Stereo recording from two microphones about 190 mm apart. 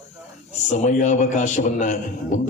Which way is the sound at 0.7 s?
40° left (ahead or behind).